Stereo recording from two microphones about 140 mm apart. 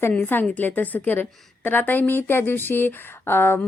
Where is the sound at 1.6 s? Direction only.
15° left (ahead or behind).